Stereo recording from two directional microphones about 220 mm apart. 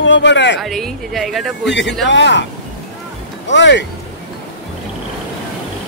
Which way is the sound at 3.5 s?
55° left (ahead or behind).